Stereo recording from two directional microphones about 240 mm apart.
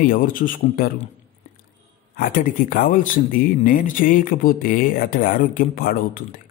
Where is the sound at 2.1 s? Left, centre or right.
Left.